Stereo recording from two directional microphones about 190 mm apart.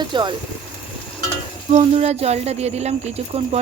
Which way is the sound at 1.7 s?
35° right (ahead or behind).